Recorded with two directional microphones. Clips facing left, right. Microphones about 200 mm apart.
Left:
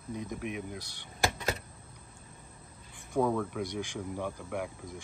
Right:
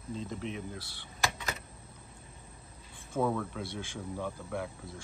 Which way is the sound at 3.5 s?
15° left (ahead or behind).